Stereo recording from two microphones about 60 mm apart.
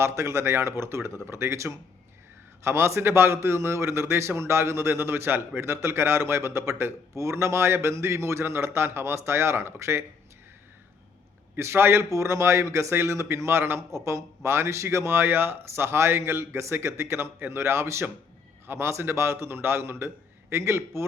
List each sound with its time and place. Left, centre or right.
0.0 s a man's voice: right
11.5 s a man's voice: right
12.1 s a man's voice: right